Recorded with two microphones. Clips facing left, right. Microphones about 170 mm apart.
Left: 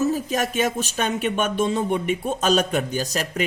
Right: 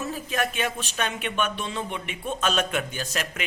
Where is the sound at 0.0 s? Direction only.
40° left (ahead or behind).